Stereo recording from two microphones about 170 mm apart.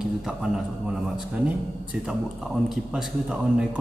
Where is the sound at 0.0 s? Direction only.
5° right (ahead or behind).